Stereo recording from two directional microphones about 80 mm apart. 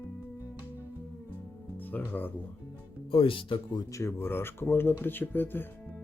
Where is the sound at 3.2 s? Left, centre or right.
Left.